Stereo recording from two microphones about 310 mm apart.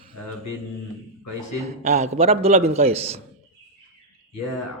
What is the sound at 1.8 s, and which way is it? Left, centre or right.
A man's voice, right.